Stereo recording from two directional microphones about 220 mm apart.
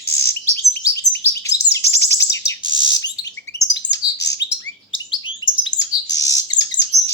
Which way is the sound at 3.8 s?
55° left (ahead or behind).